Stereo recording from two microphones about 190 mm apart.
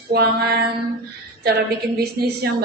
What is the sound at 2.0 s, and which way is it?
Speech, 55° right (ahead or behind).